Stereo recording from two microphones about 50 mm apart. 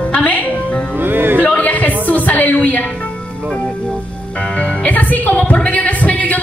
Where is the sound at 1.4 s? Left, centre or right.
Left.